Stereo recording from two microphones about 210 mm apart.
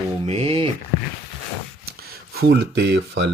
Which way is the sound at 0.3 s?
30° right (ahead or behind).